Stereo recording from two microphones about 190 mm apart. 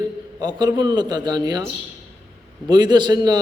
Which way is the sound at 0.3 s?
20° right (ahead or behind).